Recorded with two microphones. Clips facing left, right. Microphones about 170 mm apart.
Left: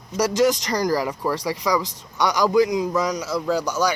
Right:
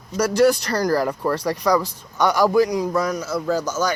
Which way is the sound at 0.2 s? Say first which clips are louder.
Right 2 dB; 15° left (ahead or behind).